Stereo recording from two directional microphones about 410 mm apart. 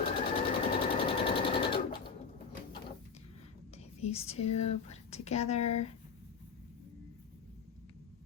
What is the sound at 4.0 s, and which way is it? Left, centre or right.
Speech, centre.